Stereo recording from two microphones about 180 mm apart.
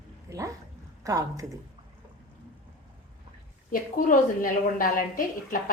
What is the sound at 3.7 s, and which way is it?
A woman's voice, 50° left (ahead or behind).